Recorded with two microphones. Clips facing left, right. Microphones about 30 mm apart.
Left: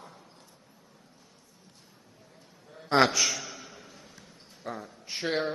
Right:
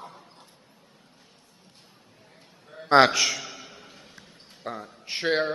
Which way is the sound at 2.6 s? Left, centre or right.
Right.